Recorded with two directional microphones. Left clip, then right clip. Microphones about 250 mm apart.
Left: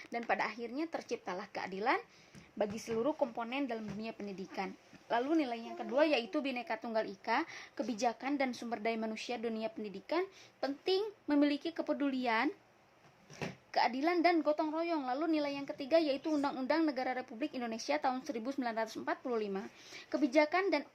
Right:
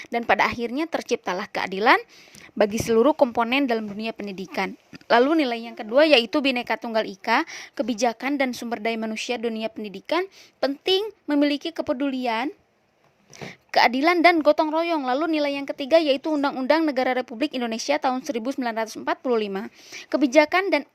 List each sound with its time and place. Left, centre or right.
0.0 s a woman's voice: right